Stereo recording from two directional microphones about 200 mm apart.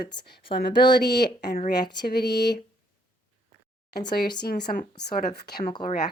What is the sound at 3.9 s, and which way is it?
Speech, 50° left (ahead or behind).